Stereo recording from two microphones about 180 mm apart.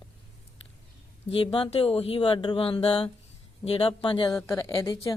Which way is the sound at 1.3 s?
30° left (ahead or behind).